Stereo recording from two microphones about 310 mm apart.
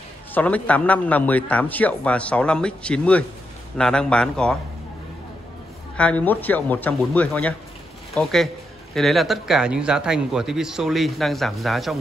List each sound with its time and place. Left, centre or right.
0.3 s a man's voice: centre
5.9 s a man's voice: centre